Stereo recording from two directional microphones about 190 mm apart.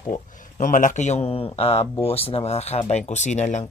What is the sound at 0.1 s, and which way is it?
Speech, 40° left (ahead or behind).